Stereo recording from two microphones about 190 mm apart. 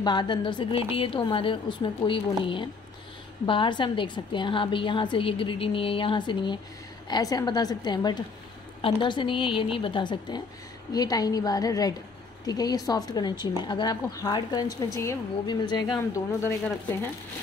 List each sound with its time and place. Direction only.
0.0 s a woman's voice: 25° left (ahead or behind)